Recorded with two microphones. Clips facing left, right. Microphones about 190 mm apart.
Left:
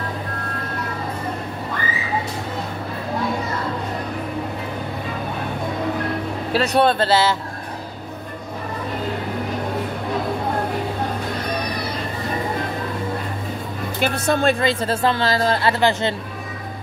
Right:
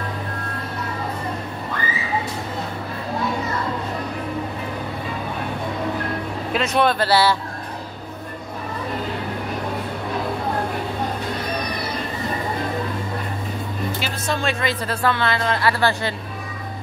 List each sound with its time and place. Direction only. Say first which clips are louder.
6.5 s a woman's voice: left 2 dB; 35° left (ahead or behind)
14.0 s speech: left 11 dB; 55° left (ahead or behind)
14.6 s a woman's voice: left 3 dB; 25° left (ahead or behind)
15.2 s a woman's voice: left 2 dB; 35° left (ahead or behind)